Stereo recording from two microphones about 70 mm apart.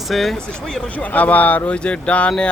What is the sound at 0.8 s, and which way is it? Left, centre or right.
Speech, left.